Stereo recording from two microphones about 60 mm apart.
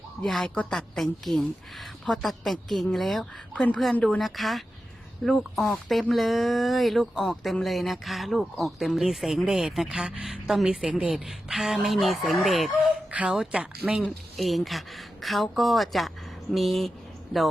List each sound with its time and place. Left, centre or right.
0.4 s a woman's voice: centre
0.9 s a woman's voice: centre
3.5 s a woman's voice: centre
4.2 s a woman's voice: centre
11.1 s a woman's voice: centre
13.2 s a woman's voice: centre
13.9 s a woman's voice: centre